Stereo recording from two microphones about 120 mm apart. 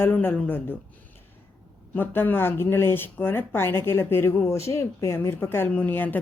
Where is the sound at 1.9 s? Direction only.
15° left (ahead or behind).